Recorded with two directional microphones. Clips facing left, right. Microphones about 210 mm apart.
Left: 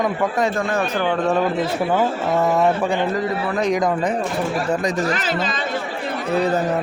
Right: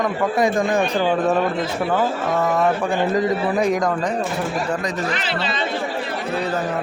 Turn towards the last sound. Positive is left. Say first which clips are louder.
# left 2 dB
turn(degrees=45)  # may be behind; listen again after turning